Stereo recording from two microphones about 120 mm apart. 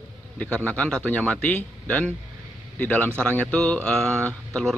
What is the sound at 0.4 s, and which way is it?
Speech, 10° left (ahead or behind).